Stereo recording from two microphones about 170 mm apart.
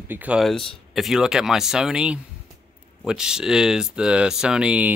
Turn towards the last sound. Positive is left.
turn(degrees=-5)  # may be behind; listen again after turning